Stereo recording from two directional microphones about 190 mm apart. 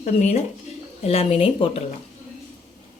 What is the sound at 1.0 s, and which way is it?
Speech, 30° left (ahead or behind).